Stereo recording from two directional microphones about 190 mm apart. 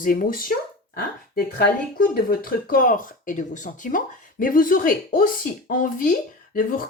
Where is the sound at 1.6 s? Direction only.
50° left (ahead or behind).